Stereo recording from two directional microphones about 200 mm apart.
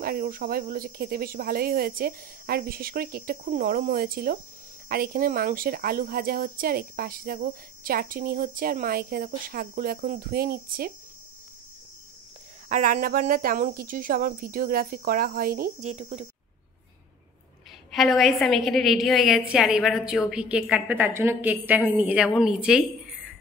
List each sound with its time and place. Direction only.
0.0 s speech: 50° right (ahead or behind)
12.6 s speech: 40° right (ahead or behind)
17.9 s a woman's voice: centre (ahead or behind)